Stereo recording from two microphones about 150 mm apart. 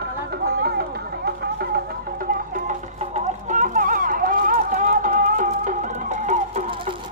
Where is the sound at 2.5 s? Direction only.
55° right (ahead or behind).